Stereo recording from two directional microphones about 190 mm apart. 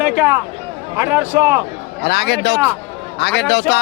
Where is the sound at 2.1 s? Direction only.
60° left (ahead or behind).